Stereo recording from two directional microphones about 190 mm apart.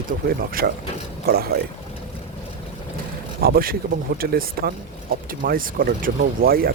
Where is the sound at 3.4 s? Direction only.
50° right (ahead or behind).